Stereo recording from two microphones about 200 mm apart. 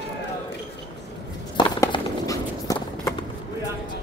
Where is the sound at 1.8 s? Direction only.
15° left (ahead or behind).